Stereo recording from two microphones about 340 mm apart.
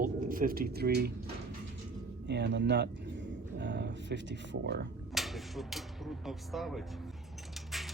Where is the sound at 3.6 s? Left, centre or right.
Right.